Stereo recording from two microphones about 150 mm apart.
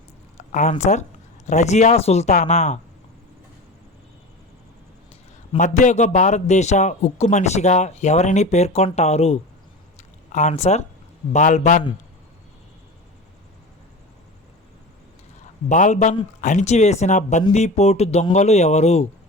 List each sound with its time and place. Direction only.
0.3 s a man's voice: 55° left (ahead or behind)
5.5 s a man's voice: 55° left (ahead or behind)
15.7 s a man's voice: 55° left (ahead or behind)